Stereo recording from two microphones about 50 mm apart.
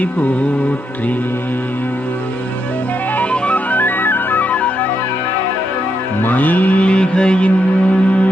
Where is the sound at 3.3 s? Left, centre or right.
Left.